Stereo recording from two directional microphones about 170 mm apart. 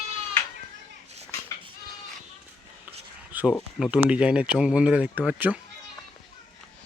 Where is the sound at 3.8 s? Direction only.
5° right (ahead or behind).